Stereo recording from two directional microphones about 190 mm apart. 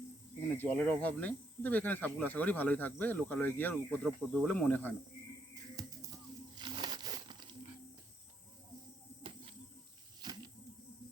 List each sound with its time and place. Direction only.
0.4 s speech: 10° left (ahead or behind)
5.8 s music: 20° right (ahead or behind)
6.6 s crumpling: 25° right (ahead or behind)
10.2 s a sound: 20° right (ahead or behind)